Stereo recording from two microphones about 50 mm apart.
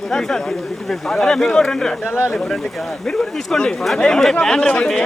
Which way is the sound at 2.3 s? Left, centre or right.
Centre.